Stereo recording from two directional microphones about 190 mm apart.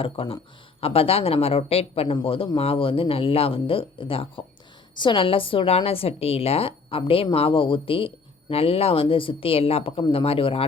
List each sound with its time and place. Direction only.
0.0 s a woman's voice: 30° left (ahead or behind)